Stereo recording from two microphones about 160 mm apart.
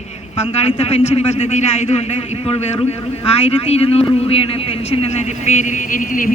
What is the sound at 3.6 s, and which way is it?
A man's voice, 40° left (ahead or behind).